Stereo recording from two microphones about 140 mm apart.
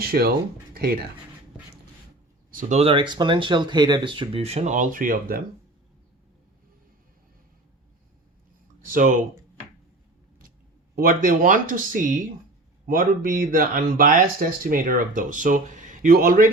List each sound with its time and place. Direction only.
0.0 s speech: 90° right
2.5 s a sound: 80° right
2.7 s speech: 40° right (ahead or behind); by 5.4 s 85° right
8.9 s speech: 70° right (ahead or behind)
10.9 s speech: 75° right (ahead or behind)
12.9 s speech: 80° right